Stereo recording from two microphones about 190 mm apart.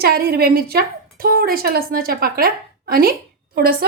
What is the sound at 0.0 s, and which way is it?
A woman's voice, 55° right (ahead or behind).